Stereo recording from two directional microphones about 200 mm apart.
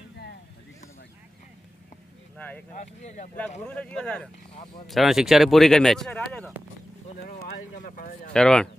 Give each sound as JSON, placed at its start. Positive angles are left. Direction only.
{"t": 2.3, "sound": "speech", "side_deg": 10}
{"t": 2.8, "sound": "speech", "side_deg": 35}
{"t": 3.6, "sound": "speech", "side_deg": 5}
{"t": 7.2, "sound": "speech", "side_deg": 45}
{"t": 8.3, "sound": "speech", "side_deg": 5}